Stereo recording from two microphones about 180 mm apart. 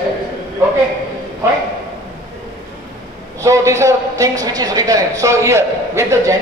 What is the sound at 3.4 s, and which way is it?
A man's voice, 15° right (ahead or behind).